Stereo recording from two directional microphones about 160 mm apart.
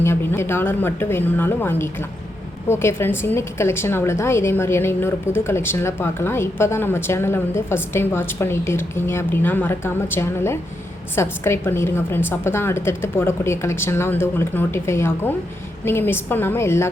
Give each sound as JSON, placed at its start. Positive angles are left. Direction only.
{"t": 0.0, "sound": "a woman's voice", "side_deg": 15}